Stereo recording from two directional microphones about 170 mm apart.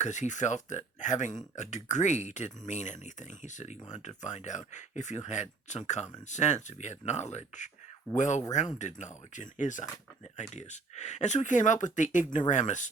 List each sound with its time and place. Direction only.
0.0 s speech: 45° left (ahead or behind)